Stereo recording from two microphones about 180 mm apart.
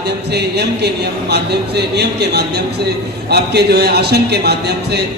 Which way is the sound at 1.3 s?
65° right (ahead or behind).